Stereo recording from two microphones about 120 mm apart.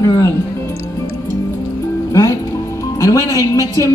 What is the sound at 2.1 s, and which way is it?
A woman's voice, 25° left (ahead or behind).